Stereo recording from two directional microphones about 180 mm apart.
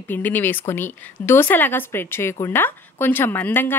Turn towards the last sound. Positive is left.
turn(degrees=10)  # may be behind; listen again after turning